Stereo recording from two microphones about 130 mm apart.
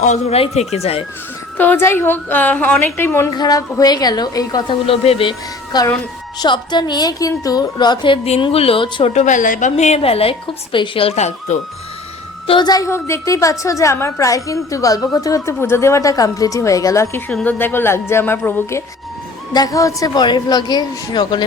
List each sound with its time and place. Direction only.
0.0 s speech: 70° left (ahead or behind)
0.3 s speech: 50° left (ahead or behind)
1.5 s a woman's voice: 15° left (ahead or behind)
3.3 s a woman's voice: 30° left (ahead or behind)
4.9 s speech: 45° left (ahead or behind)
5.7 s a woman's voice: 30° left (ahead or behind)
9.1 s a woman's voice: 75° left (ahead or behind)
12.5 s a woman's voice: 35° left (ahead or behind); by 18.8 s 15° left (ahead or behind)
19.5 s a woman's voice: 30° left (ahead or behind)